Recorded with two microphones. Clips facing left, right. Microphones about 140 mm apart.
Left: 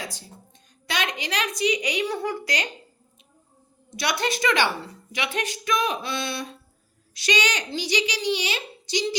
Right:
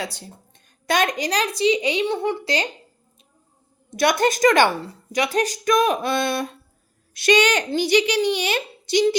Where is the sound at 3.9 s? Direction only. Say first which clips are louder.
Right 7 dB; 50° right (ahead or behind).